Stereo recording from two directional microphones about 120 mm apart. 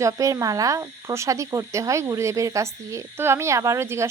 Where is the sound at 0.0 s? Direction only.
25° right (ahead or behind).